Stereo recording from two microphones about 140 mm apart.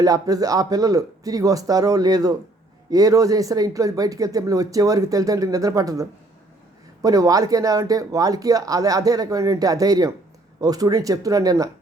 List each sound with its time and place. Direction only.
0.0 s speech: 25° right (ahead or behind)